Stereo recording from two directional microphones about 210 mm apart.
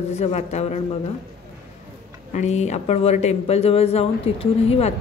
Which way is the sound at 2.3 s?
35° left (ahead or behind).